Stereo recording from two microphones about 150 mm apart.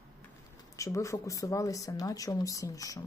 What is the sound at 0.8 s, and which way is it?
Speech, 20° left (ahead or behind).